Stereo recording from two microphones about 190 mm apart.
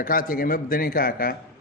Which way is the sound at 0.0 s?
50° left (ahead or behind).